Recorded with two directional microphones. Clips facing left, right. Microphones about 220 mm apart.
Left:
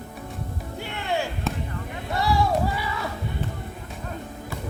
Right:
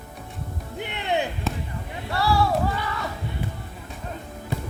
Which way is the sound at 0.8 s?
20° right (ahead or behind).